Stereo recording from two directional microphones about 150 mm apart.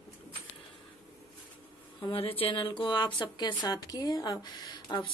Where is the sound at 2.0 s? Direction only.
35° left (ahead or behind).